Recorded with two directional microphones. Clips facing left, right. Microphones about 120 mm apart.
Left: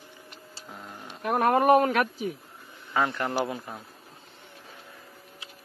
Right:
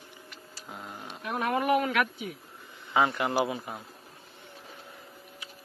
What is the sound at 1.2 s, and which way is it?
A woman's voice, 50° left (ahead or behind).